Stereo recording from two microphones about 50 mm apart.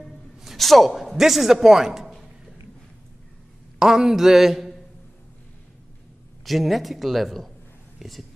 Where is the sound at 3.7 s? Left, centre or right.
Centre.